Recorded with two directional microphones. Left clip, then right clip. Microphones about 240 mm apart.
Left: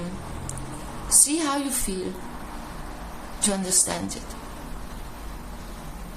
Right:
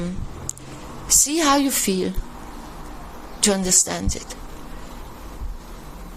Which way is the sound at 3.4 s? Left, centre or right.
Right.